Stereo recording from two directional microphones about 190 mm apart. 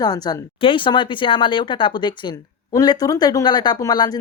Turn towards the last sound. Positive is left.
turn(degrees=20)  # may be behind; listen again after turning